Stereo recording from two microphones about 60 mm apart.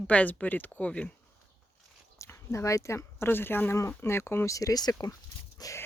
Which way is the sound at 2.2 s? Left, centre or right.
Left.